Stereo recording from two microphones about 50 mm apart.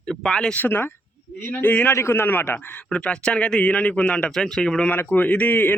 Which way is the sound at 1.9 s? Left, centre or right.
Left.